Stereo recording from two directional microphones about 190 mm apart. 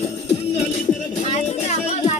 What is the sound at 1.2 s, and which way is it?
Speech, 35° left (ahead or behind).